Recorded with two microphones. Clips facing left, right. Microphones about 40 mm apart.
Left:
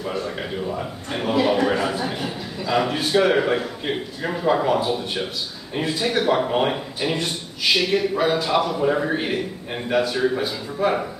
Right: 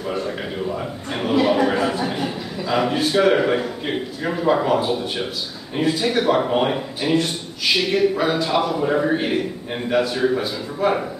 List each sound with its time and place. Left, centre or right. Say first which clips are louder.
1.1 s a man's voice: right 2 dB; centre